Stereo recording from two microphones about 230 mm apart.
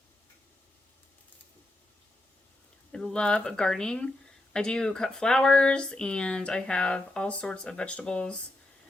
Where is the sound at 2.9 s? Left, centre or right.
Centre.